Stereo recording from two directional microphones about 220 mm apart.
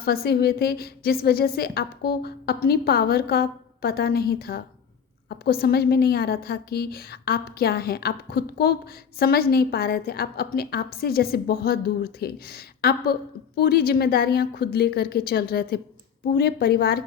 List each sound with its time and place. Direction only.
0.0 s a woman's voice: 45° left (ahead or behind)